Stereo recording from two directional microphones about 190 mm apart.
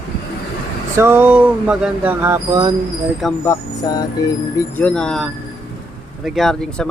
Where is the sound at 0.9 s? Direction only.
10° right (ahead or behind).